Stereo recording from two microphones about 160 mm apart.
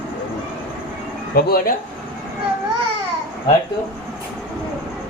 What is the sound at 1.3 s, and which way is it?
Speech, 70° left (ahead or behind).